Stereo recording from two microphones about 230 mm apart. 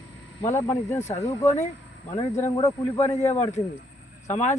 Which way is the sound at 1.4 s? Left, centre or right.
Left.